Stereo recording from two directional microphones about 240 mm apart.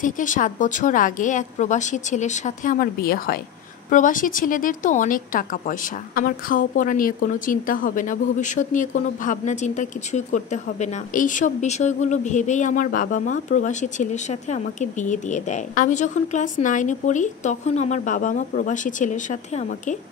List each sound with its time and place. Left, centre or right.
0.0 s speech: left